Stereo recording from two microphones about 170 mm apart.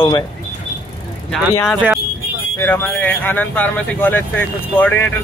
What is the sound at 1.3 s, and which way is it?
Speech, centre (ahead or behind).